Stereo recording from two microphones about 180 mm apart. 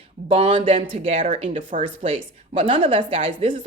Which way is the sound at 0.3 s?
30° right (ahead or behind).